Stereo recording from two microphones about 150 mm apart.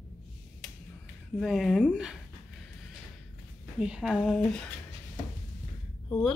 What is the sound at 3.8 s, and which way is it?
Speech, 5° right (ahead or behind).